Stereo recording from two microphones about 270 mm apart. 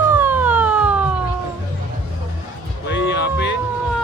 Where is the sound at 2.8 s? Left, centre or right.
Left.